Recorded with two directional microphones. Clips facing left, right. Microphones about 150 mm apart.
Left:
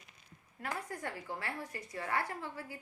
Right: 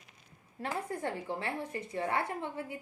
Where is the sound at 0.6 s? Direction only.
25° right (ahead or behind).